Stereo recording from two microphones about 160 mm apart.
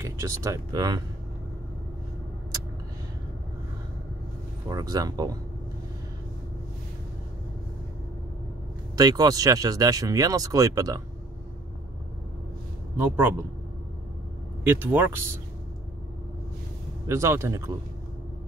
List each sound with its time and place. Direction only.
0.0 s speech: 20° right (ahead or behind)
4.6 s speech: 25° right (ahead or behind)
8.9 s speech: 25° right (ahead or behind)
12.9 s speech: 10° right (ahead or behind)
14.6 s speech: 15° right (ahead or behind)
17.1 s speech: 15° right (ahead or behind)